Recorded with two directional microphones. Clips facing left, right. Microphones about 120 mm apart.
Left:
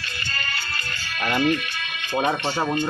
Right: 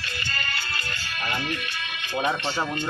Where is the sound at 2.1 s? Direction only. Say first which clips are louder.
Left 3 dB; 40° left (ahead or behind).